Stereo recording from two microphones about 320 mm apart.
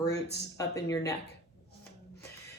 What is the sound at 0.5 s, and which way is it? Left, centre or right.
Speech, centre.